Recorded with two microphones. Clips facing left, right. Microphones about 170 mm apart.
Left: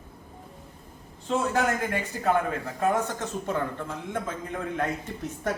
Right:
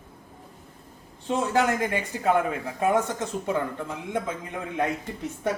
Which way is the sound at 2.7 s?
15° right (ahead or behind).